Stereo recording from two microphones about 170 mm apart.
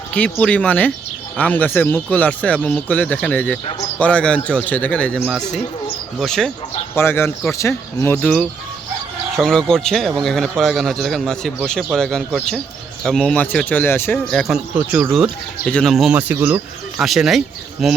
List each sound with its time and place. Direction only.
0.1 s a man's voice: 5° left (ahead or behind)
6.9 s a man's voice: 15° left (ahead or behind)
14.3 s a man's voice: centre (ahead or behind)